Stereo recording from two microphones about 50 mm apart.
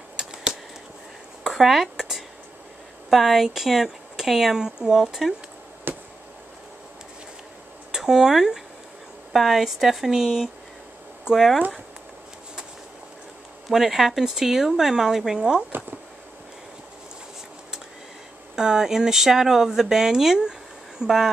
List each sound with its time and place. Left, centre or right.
0.2 s a sound: centre
3.1 s speech: centre
5.9 s a sound: right
7.9 s speech: centre
13.7 s speech: centre
18.6 s speech: centre